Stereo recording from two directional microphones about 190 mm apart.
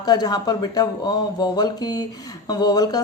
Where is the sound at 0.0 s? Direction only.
20° left (ahead or behind).